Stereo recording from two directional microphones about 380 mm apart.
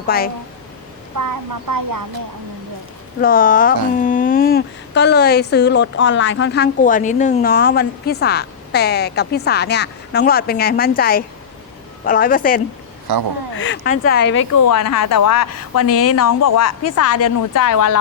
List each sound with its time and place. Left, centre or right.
0.1 s speech: left
1.1 s speech: right
3.2 s speech: left
14.5 s a woman's voice: left